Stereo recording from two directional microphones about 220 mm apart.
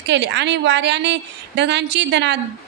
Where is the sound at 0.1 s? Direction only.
55° right (ahead or behind).